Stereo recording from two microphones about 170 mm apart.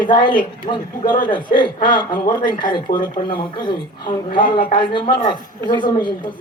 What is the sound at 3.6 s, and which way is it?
A woman's voice, 25° left (ahead or behind).